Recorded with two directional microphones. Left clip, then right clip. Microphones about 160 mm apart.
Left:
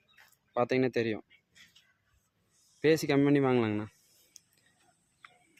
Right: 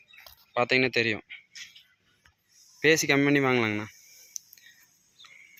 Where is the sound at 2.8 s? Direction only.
5° left (ahead or behind).